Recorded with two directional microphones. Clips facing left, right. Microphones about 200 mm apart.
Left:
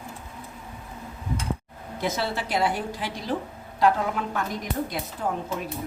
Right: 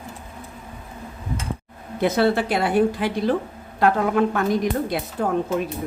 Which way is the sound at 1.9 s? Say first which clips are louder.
Right 9 dB; 60° right (ahead or behind).